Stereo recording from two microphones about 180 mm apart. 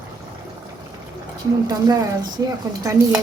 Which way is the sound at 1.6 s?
20° right (ahead or behind).